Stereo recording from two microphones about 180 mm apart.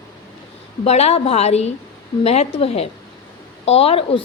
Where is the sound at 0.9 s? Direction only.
35° left (ahead or behind).